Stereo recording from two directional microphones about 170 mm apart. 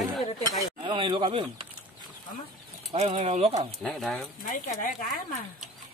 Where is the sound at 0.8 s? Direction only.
30° right (ahead or behind).